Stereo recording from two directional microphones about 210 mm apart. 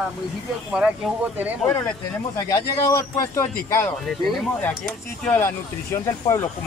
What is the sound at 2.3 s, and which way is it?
Speech, 15° left (ahead or behind).